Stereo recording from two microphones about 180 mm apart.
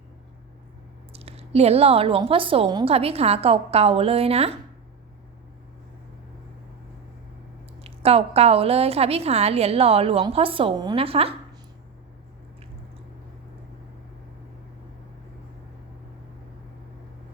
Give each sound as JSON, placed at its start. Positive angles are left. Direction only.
{"t": 1.1, "sound": "a woman's voice", "side_deg": -35}
{"t": 7.9, "sound": "a woman's voice", "side_deg": -35}